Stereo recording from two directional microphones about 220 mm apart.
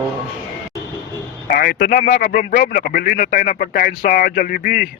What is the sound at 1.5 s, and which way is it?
Speech, 45° left (ahead or behind).